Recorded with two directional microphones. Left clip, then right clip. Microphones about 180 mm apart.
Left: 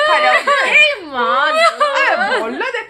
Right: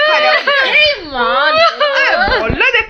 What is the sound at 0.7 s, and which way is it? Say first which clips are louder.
Speech: even; 10° left (ahead or behind).